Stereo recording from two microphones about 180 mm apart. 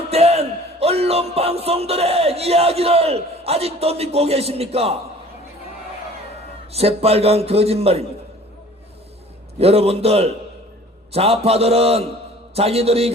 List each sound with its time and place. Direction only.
0.1 s speech: 35° right (ahead or behind)
6.7 s speech: 35° right (ahead or behind)
9.6 s speech: 35° right (ahead or behind)